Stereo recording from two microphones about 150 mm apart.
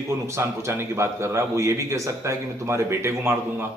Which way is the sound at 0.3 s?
15° right (ahead or behind).